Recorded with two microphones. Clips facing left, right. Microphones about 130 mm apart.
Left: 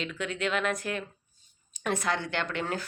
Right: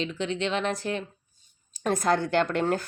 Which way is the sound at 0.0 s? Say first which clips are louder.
Right 3 dB; 30° right (ahead or behind).